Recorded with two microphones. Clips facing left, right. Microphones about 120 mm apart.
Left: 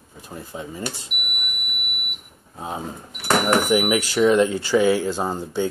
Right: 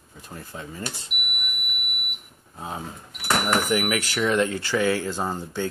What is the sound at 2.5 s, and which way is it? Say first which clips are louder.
Speech: left 4 dB; 20° left (ahead or behind).